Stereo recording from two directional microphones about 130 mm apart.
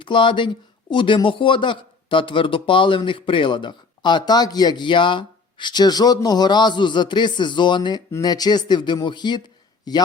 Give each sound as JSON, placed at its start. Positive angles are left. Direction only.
{"t": 0.0, "sound": "speech", "side_deg": 40}